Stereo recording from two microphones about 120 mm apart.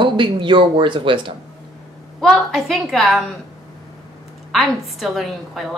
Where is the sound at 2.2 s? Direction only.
Centre (ahead or behind).